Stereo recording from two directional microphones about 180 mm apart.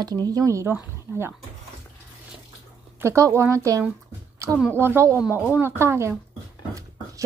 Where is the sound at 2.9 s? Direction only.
15° right (ahead or behind).